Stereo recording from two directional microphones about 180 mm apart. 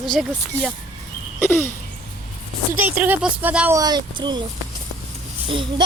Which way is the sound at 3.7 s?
25° right (ahead or behind).